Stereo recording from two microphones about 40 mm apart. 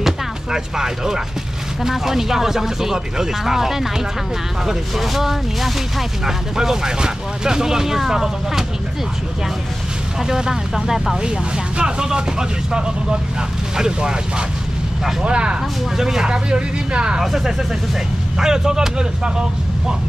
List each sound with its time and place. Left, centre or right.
0.0 s chopping: centre
1.8 s speech: centre
10.2 s speech: centre
16.0 s speech: centre
16.3 s speech: right
17.2 s speech: centre